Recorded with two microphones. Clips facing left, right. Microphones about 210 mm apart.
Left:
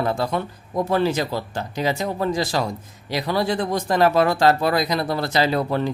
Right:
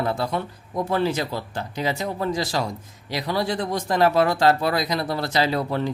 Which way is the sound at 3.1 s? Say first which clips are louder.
Left 3 dB; 55° left (ahead or behind).